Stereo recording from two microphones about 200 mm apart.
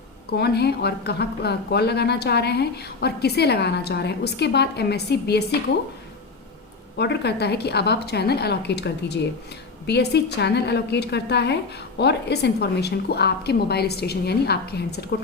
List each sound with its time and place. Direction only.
0.3 s speech: 55° left (ahead or behind)
7.0 s speech: 55° left (ahead or behind)